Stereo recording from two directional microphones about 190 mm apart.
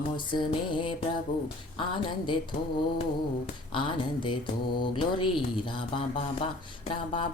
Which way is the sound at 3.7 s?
25° left (ahead or behind).